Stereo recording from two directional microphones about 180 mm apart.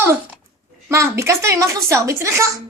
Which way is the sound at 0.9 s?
15° right (ahead or behind).